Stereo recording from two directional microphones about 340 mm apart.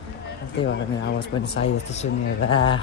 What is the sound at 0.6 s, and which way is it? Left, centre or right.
Speech, left.